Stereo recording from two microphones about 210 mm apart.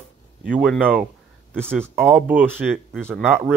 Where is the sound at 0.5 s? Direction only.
5° right (ahead or behind).